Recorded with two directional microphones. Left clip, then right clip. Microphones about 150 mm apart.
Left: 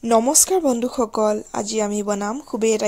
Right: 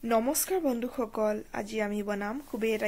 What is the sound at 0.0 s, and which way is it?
Speech, 55° left (ahead or behind).